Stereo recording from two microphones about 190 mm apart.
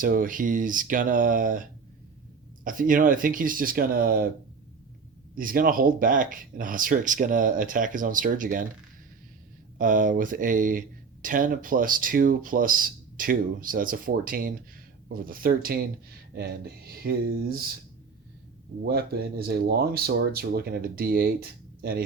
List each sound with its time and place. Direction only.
0.0 s speech: 45° right (ahead or behind)
2.6 s speech: 45° right (ahead or behind)
5.3 s speech: 45° right (ahead or behind)
9.7 s speech: 45° right (ahead or behind)
18.9 s speech: 55° right (ahead or behind)